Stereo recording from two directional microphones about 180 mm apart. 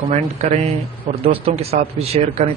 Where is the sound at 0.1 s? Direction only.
40° right (ahead or behind).